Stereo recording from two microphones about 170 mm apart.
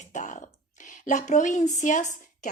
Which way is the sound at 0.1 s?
45° left (ahead or behind).